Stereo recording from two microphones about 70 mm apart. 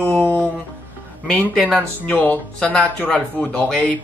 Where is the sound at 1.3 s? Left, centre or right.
Centre.